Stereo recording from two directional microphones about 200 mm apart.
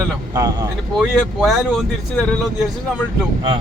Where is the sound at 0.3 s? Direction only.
20° right (ahead or behind).